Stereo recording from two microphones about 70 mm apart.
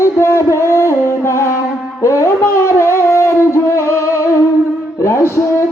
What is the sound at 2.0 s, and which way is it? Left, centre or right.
Shofar, left.